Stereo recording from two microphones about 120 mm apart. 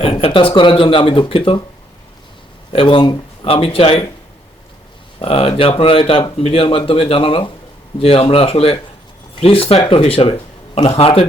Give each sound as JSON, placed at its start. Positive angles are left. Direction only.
{"t": 0.2, "sound": "speech", "side_deg": 45}
{"t": 2.7, "sound": "speech", "side_deg": 45}
{"t": 5.2, "sound": "speech", "side_deg": 50}